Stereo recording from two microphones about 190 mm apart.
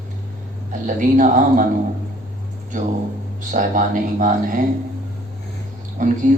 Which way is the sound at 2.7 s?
45° right (ahead or behind).